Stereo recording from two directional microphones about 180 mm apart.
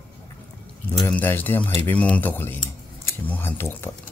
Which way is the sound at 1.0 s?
10° left (ahead or behind).